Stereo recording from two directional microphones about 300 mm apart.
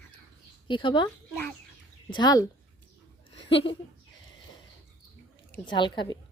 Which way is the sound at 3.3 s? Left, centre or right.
Centre.